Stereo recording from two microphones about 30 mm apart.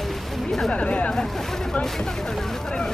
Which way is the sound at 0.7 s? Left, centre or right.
Left.